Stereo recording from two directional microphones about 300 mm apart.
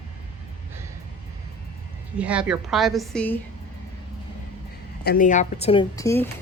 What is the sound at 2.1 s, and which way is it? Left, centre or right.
A woman's voice, centre.